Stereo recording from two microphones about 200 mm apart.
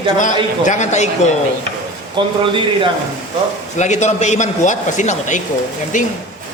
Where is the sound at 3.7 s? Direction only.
35° left (ahead or behind).